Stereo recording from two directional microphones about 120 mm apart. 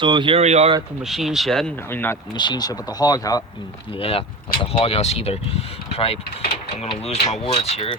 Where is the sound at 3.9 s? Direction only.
55° left (ahead or behind).